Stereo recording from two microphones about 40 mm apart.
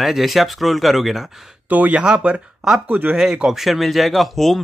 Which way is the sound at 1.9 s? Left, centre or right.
Right.